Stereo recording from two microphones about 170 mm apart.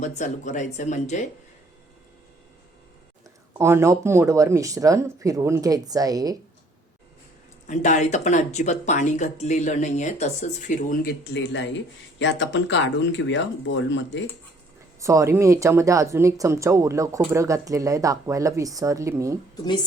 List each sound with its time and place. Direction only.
0.0 s speech: 45° left (ahead or behind)
3.6 s speech: 15° right (ahead or behind)
7.7 s speech: 45° left (ahead or behind)
11.0 s speech: 70° left (ahead or behind)
12.2 s speech: 90° left
15.0 s speech: 15° right (ahead or behind)